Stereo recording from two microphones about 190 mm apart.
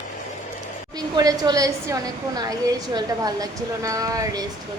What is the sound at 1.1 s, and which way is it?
A woman's voice, 20° right (ahead or behind).